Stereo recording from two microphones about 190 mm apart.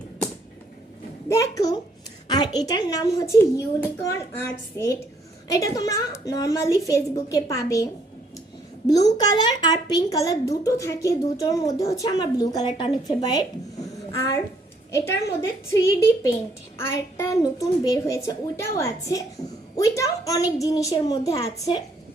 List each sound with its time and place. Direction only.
1.3 s a woman's voice: 15° left (ahead or behind)
9.0 s a woman's voice: 20° left (ahead or behind)